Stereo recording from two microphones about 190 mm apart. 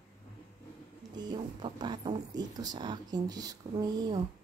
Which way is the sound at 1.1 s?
20° right (ahead or behind).